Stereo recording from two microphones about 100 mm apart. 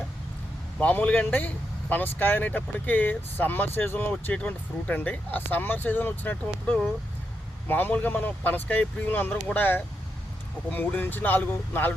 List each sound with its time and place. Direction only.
0.8 s speech: 15° left (ahead or behind)